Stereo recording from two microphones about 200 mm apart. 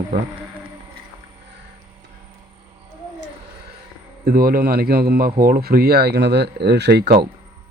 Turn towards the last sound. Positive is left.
turn(degrees=-55)  # may be behind; listen again after turning